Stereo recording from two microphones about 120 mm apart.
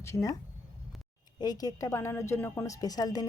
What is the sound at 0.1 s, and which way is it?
Speech, 30° left (ahead or behind).